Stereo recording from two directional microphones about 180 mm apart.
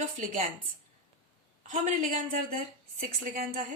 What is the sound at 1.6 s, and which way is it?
A woman's voice, 45° right (ahead or behind).